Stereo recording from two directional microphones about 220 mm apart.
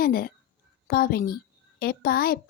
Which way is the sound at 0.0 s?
40° left (ahead or behind).